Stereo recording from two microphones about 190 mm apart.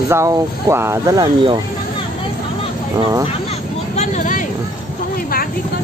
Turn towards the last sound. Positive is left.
turn(degrees=45)  # may be behind; listen again after turning